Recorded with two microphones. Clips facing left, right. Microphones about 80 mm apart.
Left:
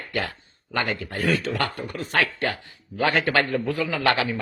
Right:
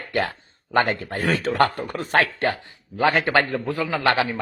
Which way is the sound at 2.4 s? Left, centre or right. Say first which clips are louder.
Right 3 dB; right.